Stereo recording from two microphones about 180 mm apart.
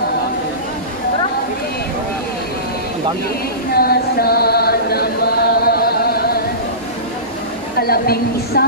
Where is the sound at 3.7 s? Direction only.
60° left (ahead or behind).